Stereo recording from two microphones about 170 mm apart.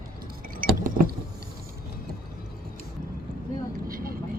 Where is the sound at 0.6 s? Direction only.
55° right (ahead or behind).